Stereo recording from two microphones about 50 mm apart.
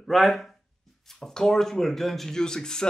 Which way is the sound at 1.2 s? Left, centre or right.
Centre.